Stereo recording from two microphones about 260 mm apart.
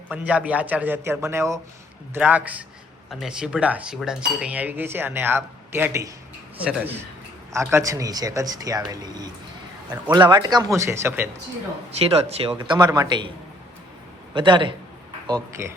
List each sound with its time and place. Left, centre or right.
0.1 s speech: centre
11.9 s speech: right
14.3 s speech: centre